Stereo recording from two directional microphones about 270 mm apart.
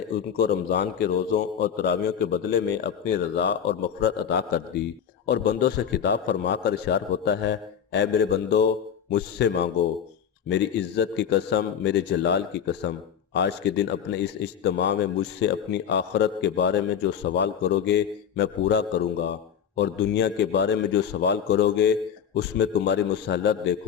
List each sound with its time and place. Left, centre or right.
0.3 s a man's voice: left